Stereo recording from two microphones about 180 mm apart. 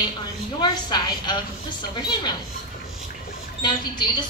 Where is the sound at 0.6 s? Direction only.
25° left (ahead or behind).